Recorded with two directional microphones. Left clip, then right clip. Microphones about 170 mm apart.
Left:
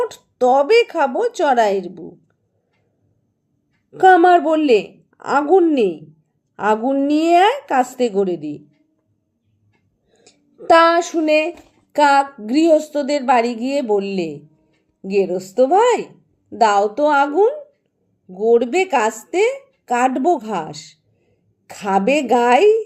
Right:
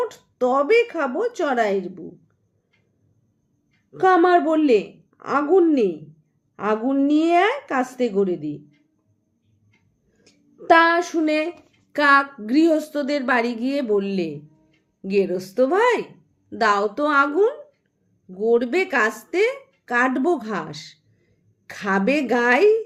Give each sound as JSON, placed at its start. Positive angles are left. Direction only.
{"t": 0.0, "sound": "a woman's voice", "side_deg": 30}
{"t": 3.9, "sound": "a woman's voice", "side_deg": 30}
{"t": 10.1, "sound": "a sound", "side_deg": 25}
{"t": 11.4, "sound": "a woman's voice", "side_deg": 25}